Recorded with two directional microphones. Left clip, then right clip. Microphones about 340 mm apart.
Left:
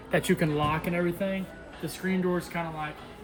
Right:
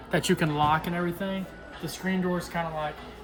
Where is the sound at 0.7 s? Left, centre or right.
Centre.